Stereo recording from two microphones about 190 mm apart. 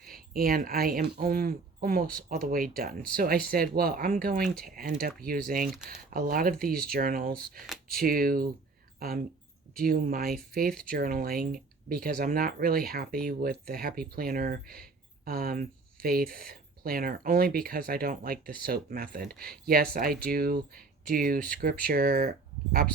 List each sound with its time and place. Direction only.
0.0 s speech: 50° right (ahead or behind)
21.3 s speech: 5° left (ahead or behind)
21.6 s speech: 50° right (ahead or behind)